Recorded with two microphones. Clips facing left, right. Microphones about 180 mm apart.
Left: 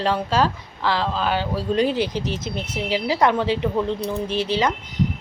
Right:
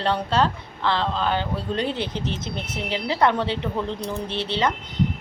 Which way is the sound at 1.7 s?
25° right (ahead or behind).